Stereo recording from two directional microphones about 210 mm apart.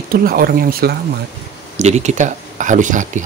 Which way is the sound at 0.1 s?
45° right (ahead or behind).